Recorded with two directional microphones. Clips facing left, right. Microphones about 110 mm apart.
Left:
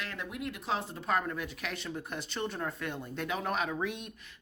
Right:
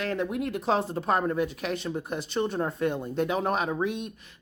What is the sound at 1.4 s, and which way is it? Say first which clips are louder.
Speech: right 8 dB; 20° right (ahead or behind).